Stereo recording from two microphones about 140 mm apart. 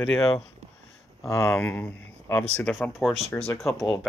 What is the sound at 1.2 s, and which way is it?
Speech, 20° left (ahead or behind).